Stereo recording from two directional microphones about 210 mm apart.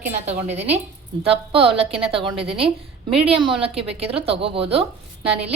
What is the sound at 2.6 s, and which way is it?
Speech, 5° right (ahead or behind).